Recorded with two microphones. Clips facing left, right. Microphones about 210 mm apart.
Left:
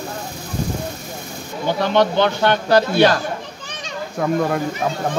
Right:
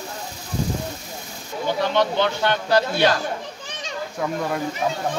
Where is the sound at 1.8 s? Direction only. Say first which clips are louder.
Left 4 dB; 75° left (ahead or behind).